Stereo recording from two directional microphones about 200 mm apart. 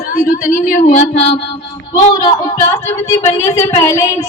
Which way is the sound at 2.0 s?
35° left (ahead or behind).